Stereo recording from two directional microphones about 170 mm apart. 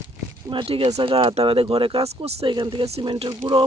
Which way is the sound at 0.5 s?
30° right (ahead or behind).